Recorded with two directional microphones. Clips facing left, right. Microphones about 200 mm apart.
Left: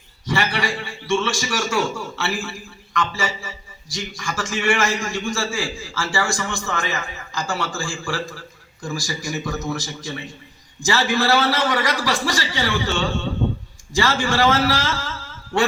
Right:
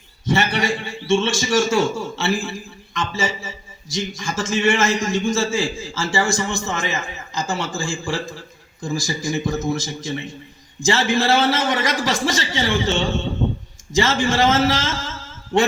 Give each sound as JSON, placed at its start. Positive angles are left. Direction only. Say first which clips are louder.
{"t": 0.3, "sound": "a man's voice", "louder": "right 3 dB", "side_deg": -25}